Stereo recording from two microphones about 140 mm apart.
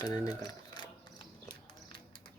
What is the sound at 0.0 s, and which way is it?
Speech, 25° left (ahead or behind).